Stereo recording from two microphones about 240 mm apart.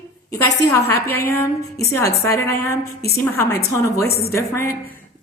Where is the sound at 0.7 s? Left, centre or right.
Centre.